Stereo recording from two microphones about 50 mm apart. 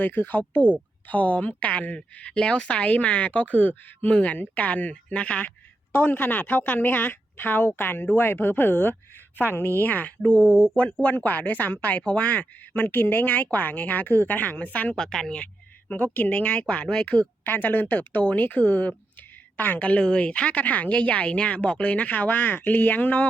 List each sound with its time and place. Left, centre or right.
0.0 s a woman's voice: left
5.9 s a woman's voice: left
10.2 s speech: left
14.9 s speech: centre
16.1 s speech: left
16.8 s speech: centre
17.4 s speech: left